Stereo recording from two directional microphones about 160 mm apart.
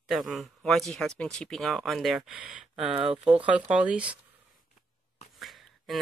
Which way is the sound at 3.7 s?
5° right (ahead or behind).